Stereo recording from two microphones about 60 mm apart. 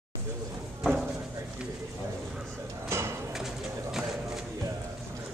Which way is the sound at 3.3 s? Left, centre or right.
Centre.